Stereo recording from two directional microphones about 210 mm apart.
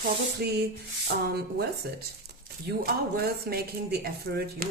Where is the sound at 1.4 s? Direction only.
50° right (ahead or behind).